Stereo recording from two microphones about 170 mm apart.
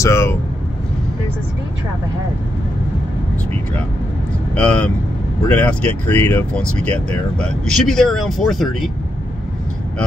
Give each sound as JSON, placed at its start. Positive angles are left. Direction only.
{"t": 0.0, "sound": "speech", "side_deg": 15}
{"t": 4.6, "sound": "speech", "side_deg": 10}